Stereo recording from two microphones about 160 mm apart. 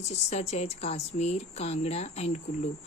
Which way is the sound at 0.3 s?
45° left (ahead or behind).